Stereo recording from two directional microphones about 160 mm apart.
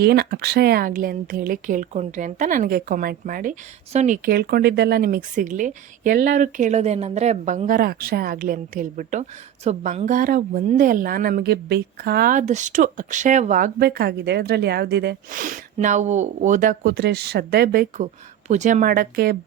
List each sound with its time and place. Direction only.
0.0 s a woman's voice: 85° right; by 3.5 s 60° right (ahead or behind)
3.9 s speech: 45° right (ahead or behind)
4.3 s a woman's voice: 75° right (ahead or behind); by 13.7 s 50° right (ahead or behind)
13.7 s speech: 80° right